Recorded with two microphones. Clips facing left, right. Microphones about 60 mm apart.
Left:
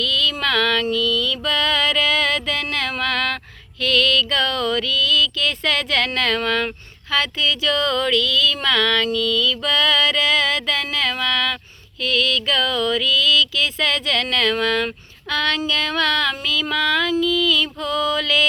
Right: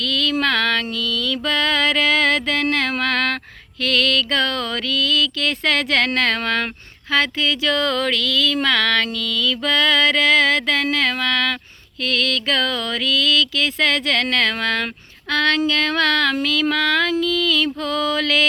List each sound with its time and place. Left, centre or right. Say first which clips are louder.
0.0 s mantra: right 1 dB; right
3.8 s female singing: left 1 dB; right
7.1 s a sound: right 2 dB; right
12.0 s female singing: left 1 dB; right